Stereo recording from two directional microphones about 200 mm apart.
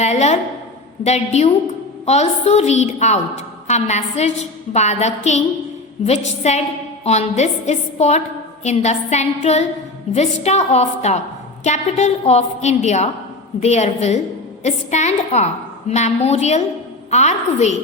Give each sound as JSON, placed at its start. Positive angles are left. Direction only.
{"t": 0.0, "sound": "a woman's voice", "side_deg": 35}